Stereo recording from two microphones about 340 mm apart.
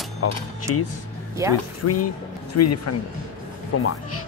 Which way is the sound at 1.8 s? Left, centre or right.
Left.